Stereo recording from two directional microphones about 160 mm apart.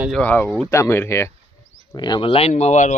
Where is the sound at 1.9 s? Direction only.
25° left (ahead or behind); by 3.0 s 50° left (ahead or behind).